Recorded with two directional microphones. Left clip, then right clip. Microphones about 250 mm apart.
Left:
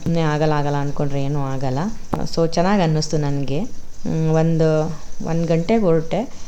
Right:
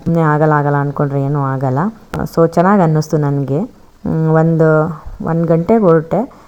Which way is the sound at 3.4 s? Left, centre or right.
Right.